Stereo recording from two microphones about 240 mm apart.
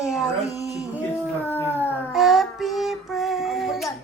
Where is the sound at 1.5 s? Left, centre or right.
Centre.